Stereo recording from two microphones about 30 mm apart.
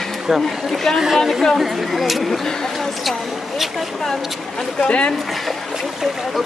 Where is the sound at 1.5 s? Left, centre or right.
Centre.